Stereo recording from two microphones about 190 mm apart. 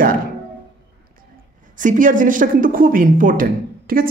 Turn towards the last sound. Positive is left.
turn(degrees=-50)  # may be behind; listen again after turning